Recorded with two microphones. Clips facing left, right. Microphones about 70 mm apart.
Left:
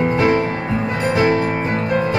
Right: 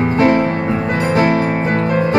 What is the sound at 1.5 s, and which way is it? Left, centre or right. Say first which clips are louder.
Music: right 3 dB; right.